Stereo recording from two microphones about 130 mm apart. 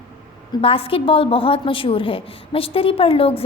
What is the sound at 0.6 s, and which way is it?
A woman's voice, 45° left (ahead or behind).